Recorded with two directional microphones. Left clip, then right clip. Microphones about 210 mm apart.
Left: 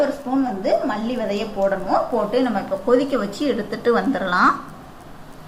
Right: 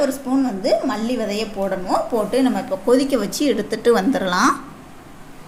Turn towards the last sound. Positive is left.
turn(degrees=-45)  # may be behind; listen again after turning